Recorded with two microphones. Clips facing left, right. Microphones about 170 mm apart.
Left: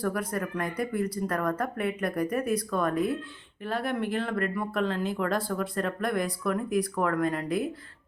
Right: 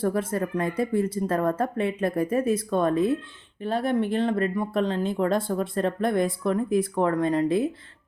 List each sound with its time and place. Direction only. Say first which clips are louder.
0.0 s speech: right 5 dB; 25° right (ahead or behind)